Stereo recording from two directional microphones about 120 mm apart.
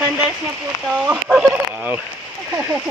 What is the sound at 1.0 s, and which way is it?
Speech, 5° right (ahead or behind).